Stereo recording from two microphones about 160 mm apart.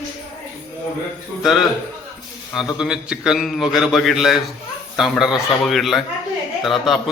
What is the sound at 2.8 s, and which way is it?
Speech, 5° right (ahead or behind).